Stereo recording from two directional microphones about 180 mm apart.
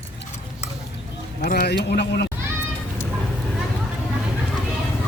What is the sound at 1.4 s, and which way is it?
Speech, 45° left (ahead or behind).